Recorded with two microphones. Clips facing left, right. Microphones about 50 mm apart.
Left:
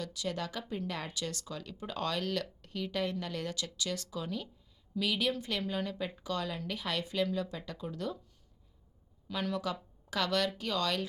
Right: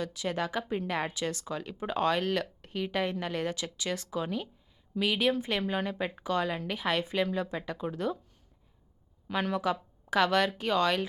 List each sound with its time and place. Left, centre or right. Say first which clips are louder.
0.0 s speech: right 5 dB; right
9.2 s speech: right 5 dB; right